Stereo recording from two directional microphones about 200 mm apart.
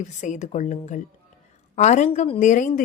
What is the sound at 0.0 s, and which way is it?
Speech, 35° left (ahead or behind).